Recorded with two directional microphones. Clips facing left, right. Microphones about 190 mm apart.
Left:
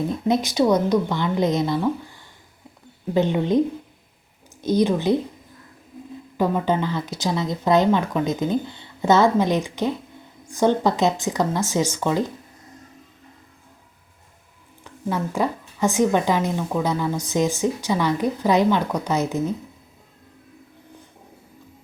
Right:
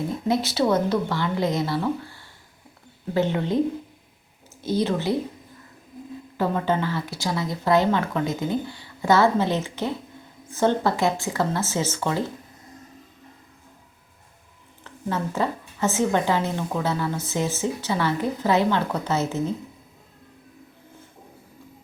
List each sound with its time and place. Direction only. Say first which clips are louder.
0.3 s a woman's voice: left 3 dB; 15° left (ahead or behind)
3.2 s a woman's voice: left 3 dB; 15° left (ahead or behind)
4.6 s a woman's voice: left 4 dB; 15° left (ahead or behind)
6.3 s a woman's voice: left 2 dB; 15° left (ahead or behind)
14.8 s a woman's voice: left 2 dB; 10° left (ahead or behind)